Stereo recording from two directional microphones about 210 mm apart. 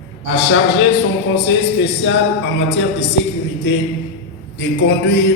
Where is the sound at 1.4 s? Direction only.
55° left (ahead or behind).